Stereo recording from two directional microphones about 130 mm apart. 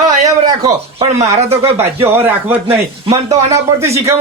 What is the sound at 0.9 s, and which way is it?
Speech, 55° right (ahead or behind).